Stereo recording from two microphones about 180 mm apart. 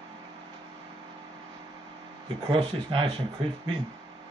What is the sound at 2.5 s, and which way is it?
Speech, 30° right (ahead or behind).